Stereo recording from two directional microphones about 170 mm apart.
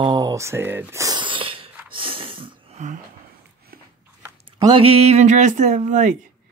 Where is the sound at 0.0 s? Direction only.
25° right (ahead or behind).